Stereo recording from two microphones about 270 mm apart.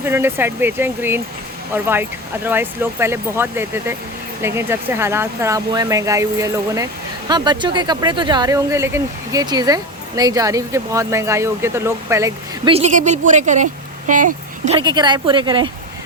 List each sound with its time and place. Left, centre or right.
0.0 s speech: centre